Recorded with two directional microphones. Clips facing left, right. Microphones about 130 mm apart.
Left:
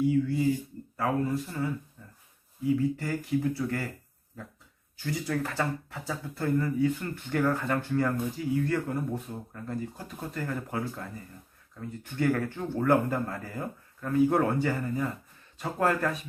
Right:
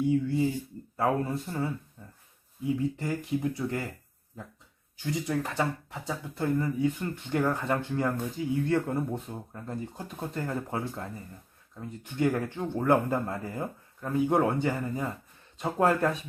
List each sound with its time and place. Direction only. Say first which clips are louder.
0.1 s speech: left 1 dB; 25° right (ahead or behind)
2.0 s a sound: right 2 dB; 25° right (ahead or behind)
3.0 s speech: left 1 dB; 20° right (ahead or behind)
4.9 s speech: right 1 dB; 20° right (ahead or behind)